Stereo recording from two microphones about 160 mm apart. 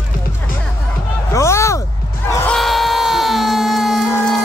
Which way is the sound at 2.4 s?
Centre (ahead or behind).